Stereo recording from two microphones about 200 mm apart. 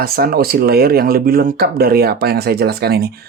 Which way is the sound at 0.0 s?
50° right (ahead or behind).